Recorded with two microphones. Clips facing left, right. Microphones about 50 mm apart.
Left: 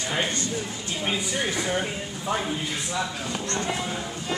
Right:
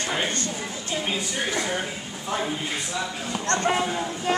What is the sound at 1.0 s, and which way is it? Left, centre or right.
Speech, centre.